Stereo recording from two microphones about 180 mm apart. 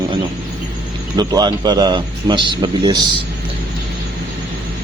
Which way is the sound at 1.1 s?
20° right (ahead or behind).